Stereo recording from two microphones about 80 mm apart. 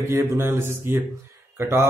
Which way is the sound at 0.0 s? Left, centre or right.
Right.